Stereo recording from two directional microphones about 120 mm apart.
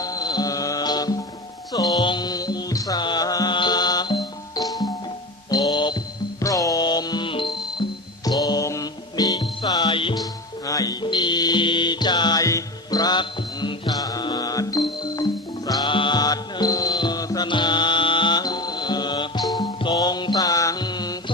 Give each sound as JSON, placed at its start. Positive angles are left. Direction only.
{"t": 0.0, "sound": "music", "side_deg": 30}
{"t": 10.7, "sound": "music", "side_deg": 30}